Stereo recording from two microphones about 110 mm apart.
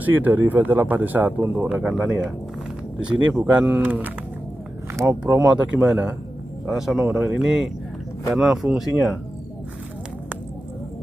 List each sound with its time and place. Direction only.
0.0 s speech: 15° right (ahead or behind)
5.3 s speech: 15° right (ahead or behind)